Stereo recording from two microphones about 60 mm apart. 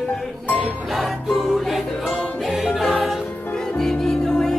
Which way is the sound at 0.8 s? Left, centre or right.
Centre.